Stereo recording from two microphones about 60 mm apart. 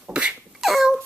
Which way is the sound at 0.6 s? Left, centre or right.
Centre.